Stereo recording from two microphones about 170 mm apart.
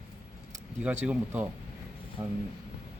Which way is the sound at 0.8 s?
10° right (ahead or behind).